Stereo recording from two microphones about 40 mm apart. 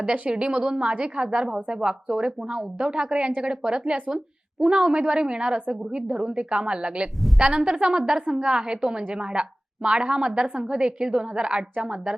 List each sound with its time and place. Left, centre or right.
0.0 s a woman's voice: right